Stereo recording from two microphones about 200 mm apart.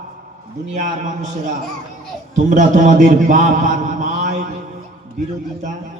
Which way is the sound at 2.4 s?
40° right (ahead or behind).